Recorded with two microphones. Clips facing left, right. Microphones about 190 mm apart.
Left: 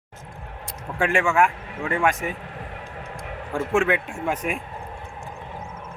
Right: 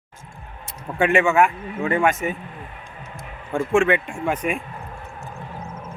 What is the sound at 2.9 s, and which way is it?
Music, 75° left (ahead or behind).